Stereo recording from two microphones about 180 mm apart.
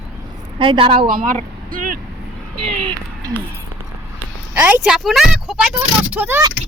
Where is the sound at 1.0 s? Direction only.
50° right (ahead or behind).